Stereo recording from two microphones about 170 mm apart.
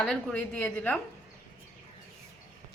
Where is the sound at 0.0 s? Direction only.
5° left (ahead or behind).